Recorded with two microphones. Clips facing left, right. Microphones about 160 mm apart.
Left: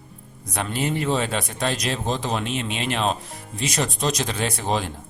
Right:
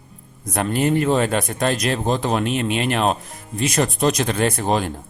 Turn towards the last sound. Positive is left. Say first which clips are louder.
# right 5 dB
turn(degrees=-50)  # may be behind; listen again after turning